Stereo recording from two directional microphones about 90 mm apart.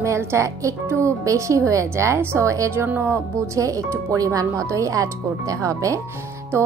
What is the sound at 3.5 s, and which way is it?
Speech, 35° right (ahead or behind).